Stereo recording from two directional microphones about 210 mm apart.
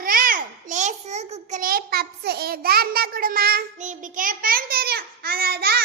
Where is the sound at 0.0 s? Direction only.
40° right (ahead or behind).